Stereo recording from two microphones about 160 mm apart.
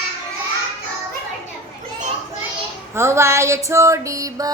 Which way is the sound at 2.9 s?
15° right (ahead or behind).